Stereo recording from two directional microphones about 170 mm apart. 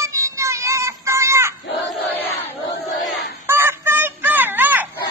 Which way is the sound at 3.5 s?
15° right (ahead or behind).